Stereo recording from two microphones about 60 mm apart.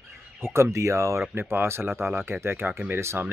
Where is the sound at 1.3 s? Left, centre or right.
Right.